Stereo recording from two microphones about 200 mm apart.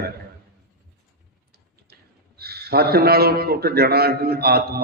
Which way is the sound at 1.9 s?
50° right (ahead or behind).